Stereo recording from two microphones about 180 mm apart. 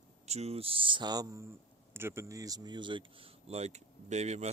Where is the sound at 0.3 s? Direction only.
35° right (ahead or behind).